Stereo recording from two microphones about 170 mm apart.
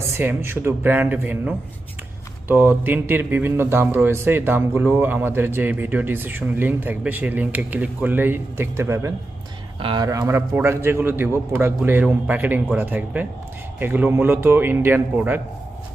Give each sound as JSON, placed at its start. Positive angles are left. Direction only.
{"t": 0.1, "sound": "speech", "side_deg": -15}
{"t": 9.8, "sound": "speech", "side_deg": -30}
{"t": 10.1, "sound": "speech", "side_deg": -15}